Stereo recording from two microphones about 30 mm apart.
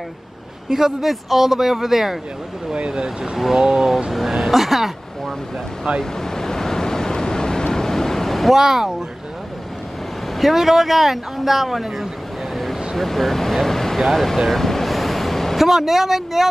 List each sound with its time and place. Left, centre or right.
0.7 s speech: centre
1.0 s speech: centre
2.9 s speech: right
4.3 s speech: centre
5.9 s speech: right
6.2 s waves: centre
8.5 s speech: centre
10.3 s speech: centre
12.9 s speech: centre
14.5 s vehicle: centre
15.6 s speech: centre